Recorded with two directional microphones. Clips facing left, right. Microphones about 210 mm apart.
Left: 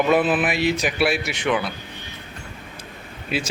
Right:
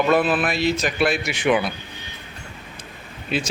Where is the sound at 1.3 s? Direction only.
10° right (ahead or behind).